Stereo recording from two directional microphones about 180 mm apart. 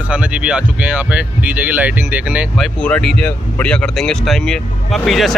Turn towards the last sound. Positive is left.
turn(degrees=0)  # may be behind; listen again after turning